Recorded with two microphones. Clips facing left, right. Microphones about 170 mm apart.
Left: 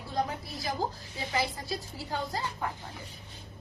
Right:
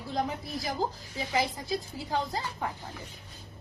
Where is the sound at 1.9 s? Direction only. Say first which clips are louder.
Right 3 dB; 20° right (ahead or behind).